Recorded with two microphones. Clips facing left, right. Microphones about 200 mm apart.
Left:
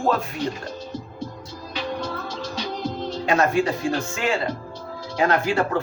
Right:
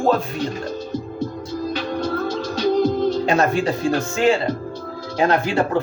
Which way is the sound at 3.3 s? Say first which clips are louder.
Right 2 dB; 30° right (ahead or behind).